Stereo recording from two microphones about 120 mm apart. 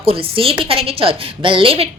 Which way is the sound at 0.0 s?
50° right (ahead or behind).